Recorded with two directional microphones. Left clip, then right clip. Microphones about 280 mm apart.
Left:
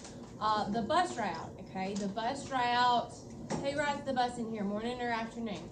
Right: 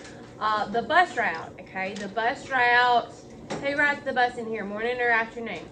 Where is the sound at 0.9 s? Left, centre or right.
Left.